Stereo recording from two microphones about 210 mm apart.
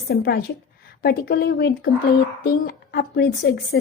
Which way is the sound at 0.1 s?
50° left (ahead or behind).